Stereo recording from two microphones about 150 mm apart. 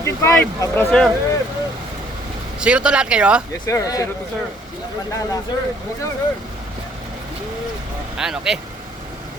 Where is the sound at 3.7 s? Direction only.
20° left (ahead or behind).